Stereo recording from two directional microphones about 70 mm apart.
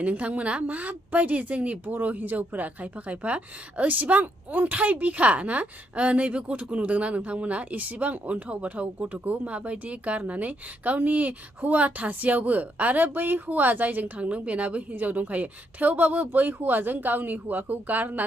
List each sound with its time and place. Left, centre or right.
0.0 s a woman's voice: centre